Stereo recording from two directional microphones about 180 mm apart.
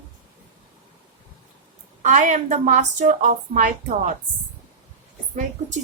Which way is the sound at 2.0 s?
45° right (ahead or behind).